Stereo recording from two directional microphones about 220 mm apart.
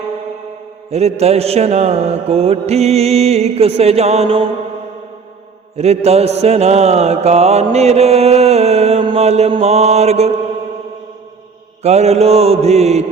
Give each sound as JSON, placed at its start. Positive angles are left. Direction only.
{"t": 0.9, "sound": "mantra", "side_deg": -30}
{"t": 5.7, "sound": "mantra", "side_deg": -30}
{"t": 11.8, "sound": "mantra", "side_deg": -30}